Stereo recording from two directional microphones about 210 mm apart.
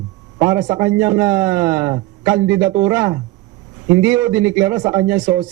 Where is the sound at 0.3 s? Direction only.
15° right (ahead or behind).